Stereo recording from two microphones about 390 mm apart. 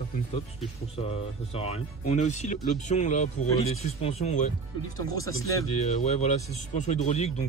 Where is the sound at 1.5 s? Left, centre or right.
Centre.